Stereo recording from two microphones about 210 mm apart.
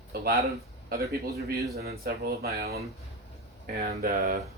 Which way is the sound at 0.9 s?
45° right (ahead or behind).